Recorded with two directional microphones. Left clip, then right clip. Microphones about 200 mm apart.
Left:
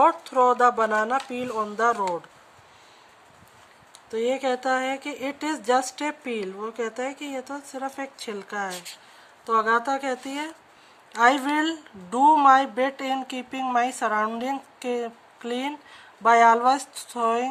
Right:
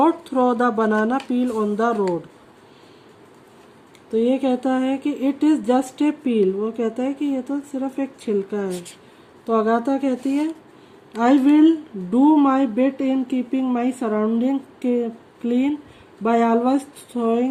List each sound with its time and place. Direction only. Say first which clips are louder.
0.0 s speech: right 1 dB; 15° left (ahead or behind)
4.1 s speech: right 5 dB; 20° left (ahead or behind)